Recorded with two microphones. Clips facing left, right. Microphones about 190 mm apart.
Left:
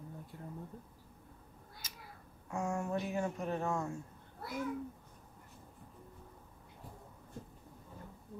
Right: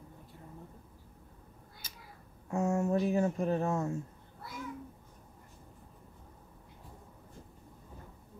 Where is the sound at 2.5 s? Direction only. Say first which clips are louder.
Right 6 dB; 25° right (ahead or behind).